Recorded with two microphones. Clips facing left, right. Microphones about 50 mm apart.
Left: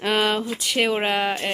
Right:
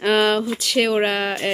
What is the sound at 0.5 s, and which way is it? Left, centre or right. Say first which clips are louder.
Speech: right 4 dB; left.